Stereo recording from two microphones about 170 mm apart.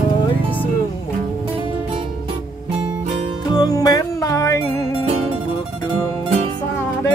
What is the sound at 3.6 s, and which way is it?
Music, 20° left (ahead or behind).